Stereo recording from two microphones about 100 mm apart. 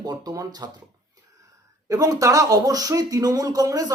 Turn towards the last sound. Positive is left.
turn(degrees=-35)  # may be behind; listen again after turning